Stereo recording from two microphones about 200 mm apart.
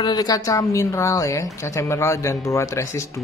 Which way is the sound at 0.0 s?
20° left (ahead or behind).